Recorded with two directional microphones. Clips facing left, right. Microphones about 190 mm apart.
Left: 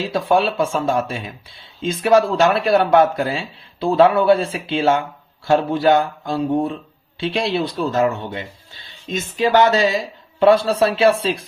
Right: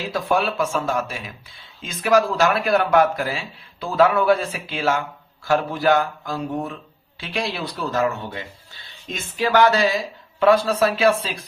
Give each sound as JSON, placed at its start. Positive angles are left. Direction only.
{"t": 0.1, "sound": "speech", "side_deg": 30}